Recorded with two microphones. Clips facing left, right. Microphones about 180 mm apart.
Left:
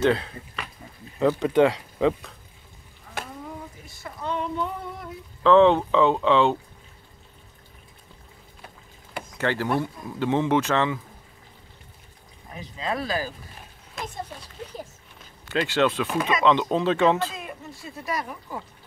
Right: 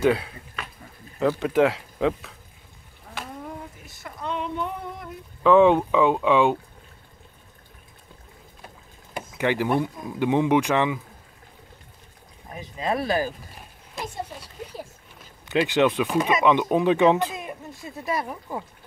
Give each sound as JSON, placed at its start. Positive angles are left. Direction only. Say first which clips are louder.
{"t": 0.0, "sound": "speech", "louder": "right 1 dB", "side_deg": -10}
{"t": 5.4, "sound": "speech", "louder": "even", "side_deg": -10}
{"t": 9.4, "sound": "speech", "louder": "right 2 dB", "side_deg": -15}
{"t": 12.5, "sound": "speech", "louder": "right 3 dB", "side_deg": -25}
{"t": 15.4, "sound": "speech", "louder": "right 2 dB", "side_deg": -15}